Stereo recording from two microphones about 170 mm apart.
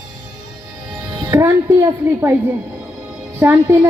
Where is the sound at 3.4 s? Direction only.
10° right (ahead or behind).